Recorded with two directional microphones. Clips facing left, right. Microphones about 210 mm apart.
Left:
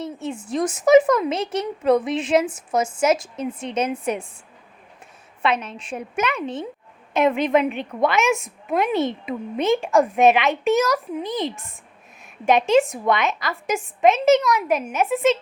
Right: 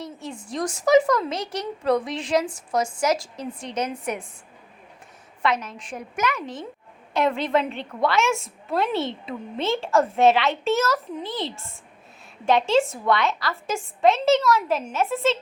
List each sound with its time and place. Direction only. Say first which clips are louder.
0.0 s a sound: left 6 dB; 25° left (ahead or behind)
0.4 s a woman's voice: left 4 dB; 20° left (ahead or behind)
5.4 s a woman's voice: left 2 dB; 25° left (ahead or behind)